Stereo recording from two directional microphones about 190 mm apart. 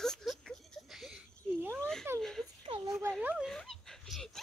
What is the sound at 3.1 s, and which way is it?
Dog, centre (ahead or behind).